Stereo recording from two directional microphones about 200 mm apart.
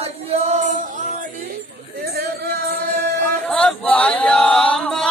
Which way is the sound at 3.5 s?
5° left (ahead or behind).